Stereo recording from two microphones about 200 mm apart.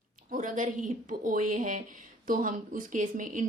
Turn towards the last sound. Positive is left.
turn(degrees=-40)  # may be behind; listen again after turning